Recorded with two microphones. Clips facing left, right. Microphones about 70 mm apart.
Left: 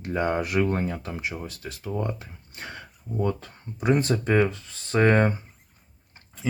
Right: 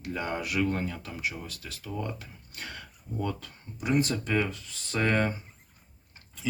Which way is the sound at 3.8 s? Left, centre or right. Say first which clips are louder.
Left 4 dB; left.